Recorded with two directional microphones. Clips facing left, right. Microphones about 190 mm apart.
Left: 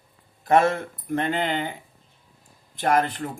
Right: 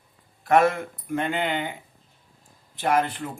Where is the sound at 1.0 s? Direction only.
40° left (ahead or behind).